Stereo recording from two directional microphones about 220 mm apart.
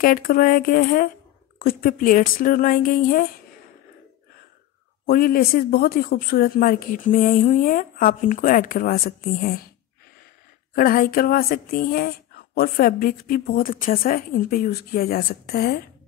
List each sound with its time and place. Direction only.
0.0 s a woman's voice: 40° left (ahead or behind)
5.0 s a woman's voice: 40° left (ahead or behind)
10.7 s a woman's voice: 45° left (ahead or behind)